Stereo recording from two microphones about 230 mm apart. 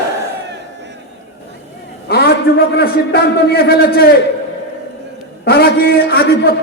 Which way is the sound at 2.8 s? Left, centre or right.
Left.